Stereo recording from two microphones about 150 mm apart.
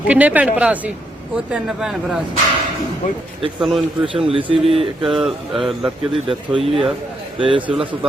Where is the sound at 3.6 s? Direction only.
Centre (ahead or behind).